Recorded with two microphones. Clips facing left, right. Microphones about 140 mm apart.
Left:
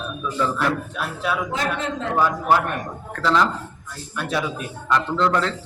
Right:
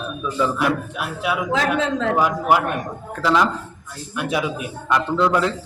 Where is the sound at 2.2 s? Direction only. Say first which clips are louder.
Left 1 dB; 15° right (ahead or behind).